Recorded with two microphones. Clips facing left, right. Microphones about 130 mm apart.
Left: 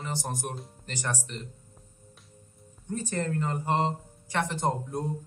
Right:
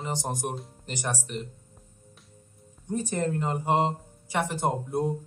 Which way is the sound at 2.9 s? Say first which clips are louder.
Right 3 dB; 15° right (ahead or behind).